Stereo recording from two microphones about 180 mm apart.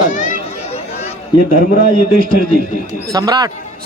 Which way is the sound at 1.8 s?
50° right (ahead or behind).